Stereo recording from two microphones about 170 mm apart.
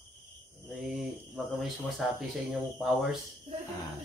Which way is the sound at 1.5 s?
Centre (ahead or behind).